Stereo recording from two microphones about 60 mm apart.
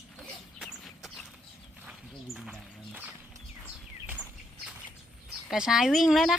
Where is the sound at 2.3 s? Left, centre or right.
Centre.